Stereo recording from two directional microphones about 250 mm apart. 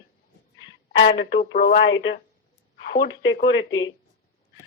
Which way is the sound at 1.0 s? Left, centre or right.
Left.